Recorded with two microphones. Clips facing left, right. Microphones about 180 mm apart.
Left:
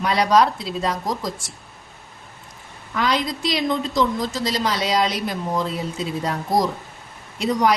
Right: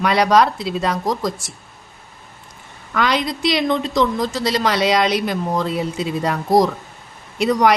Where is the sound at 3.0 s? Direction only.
75° right (ahead or behind).